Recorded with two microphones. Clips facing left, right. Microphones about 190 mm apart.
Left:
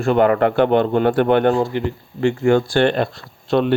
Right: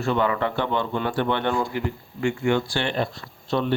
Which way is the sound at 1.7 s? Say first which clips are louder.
Left 5 dB; 25° left (ahead or behind).